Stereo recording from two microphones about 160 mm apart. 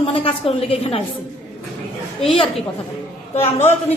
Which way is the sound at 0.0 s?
35° left (ahead or behind).